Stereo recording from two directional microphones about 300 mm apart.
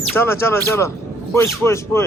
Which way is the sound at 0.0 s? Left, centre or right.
Centre.